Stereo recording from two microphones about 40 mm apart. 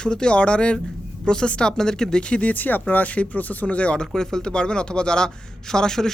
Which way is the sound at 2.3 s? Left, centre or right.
Left.